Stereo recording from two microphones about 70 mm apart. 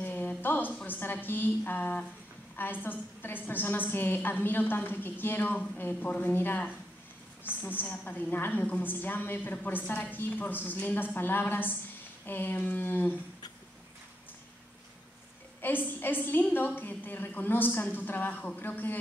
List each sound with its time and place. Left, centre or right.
0.0 s a sound: left
0.8 s a woman's voice: left
15.6 s a woman's voice: left